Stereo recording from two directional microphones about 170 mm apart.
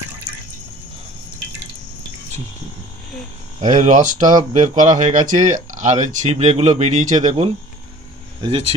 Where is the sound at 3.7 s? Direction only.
45° right (ahead or behind).